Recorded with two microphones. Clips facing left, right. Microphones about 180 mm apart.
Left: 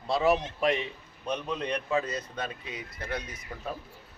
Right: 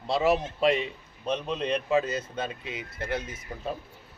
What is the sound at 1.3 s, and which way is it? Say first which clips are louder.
A man's voice: right 3 dB; 25° right (ahead or behind).